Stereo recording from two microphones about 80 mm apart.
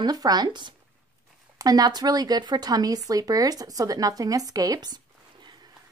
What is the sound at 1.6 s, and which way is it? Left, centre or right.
Speech, right.